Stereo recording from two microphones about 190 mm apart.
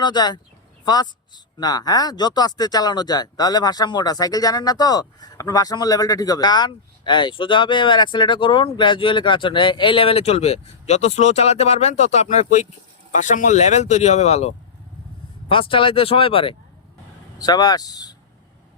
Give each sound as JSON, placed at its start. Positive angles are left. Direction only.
{"t": 0.0, "sound": "speech", "side_deg": 20}
{"t": 1.5, "sound": "speech", "side_deg": 20}